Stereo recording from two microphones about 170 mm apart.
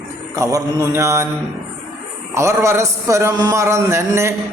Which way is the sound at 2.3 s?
15° right (ahead or behind).